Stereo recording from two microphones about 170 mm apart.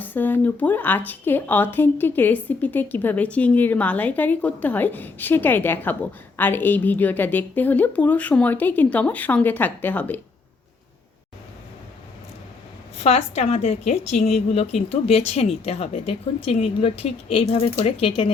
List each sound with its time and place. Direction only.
0.0 s speech: 10° left (ahead or behind)
13.0 s speech: 40° left (ahead or behind)